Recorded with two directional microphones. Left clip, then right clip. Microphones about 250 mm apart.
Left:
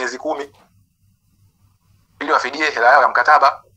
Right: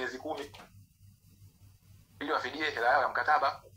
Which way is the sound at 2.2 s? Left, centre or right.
Left.